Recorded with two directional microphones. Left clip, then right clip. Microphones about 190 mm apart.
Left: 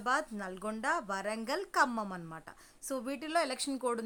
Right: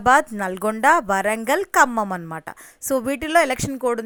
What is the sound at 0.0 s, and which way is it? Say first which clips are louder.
A woman's voice: right 17 dB; 45° right (ahead or behind).